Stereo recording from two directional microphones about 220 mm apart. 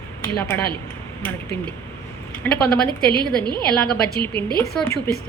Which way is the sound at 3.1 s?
20° right (ahead or behind).